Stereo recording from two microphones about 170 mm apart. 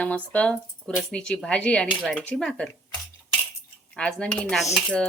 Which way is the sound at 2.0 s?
5° right (ahead or behind).